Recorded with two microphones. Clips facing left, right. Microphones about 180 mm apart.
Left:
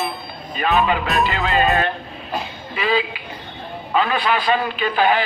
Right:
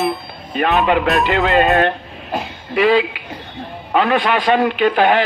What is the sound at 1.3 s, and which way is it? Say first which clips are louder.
A man's voice: right 7 dB; 70° right (ahead or behind).